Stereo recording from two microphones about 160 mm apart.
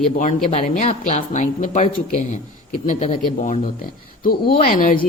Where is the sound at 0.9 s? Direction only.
45° left (ahead or behind).